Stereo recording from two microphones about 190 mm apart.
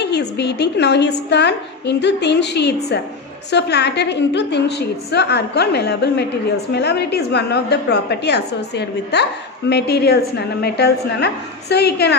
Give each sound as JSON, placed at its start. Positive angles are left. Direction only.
{"t": 0.0, "sound": "a woman's voice", "side_deg": 60}